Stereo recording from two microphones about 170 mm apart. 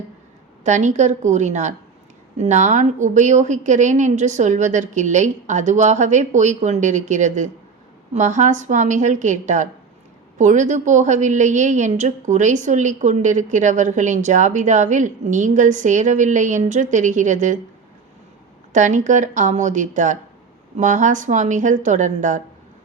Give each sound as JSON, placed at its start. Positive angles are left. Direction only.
{"t": 0.6, "sound": "a woman's voice", "side_deg": -45}
{"t": 18.7, "sound": "a woman's voice", "side_deg": -45}